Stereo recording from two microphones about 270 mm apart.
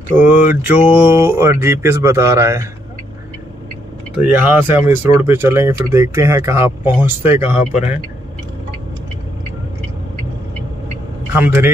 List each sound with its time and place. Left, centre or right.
0.2 s speech: centre
4.2 s speech: centre
7.7 s a man's voice: left
11.3 s speech: centre